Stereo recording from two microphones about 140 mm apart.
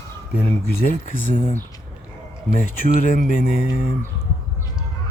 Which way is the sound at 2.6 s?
90° left.